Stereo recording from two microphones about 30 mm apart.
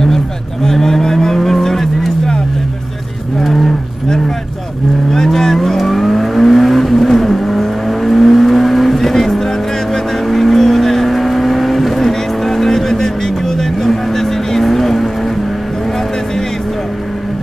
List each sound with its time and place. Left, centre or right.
0.7 s cattle: centre
1.0 s vehicle: centre
5.1 s vehicle: centre
5.7 s vehicle: centre